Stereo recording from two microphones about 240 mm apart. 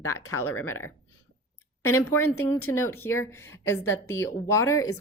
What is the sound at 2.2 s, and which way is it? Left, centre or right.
Speech, left.